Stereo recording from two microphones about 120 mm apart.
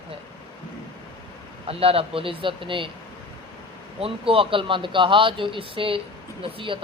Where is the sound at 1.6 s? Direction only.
50° right (ahead or behind).